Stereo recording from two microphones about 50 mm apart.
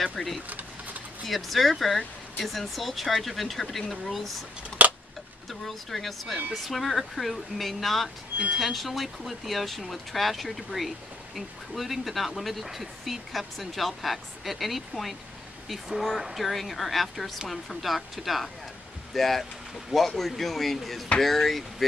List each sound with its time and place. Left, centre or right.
0.0 s speech: centre
0.5 s sewing machine: right
1.2 s speech: centre
4.8 s a sound: right
5.5 s speech: centre